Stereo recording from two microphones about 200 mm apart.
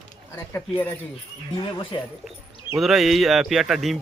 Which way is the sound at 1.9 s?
20° left (ahead or behind).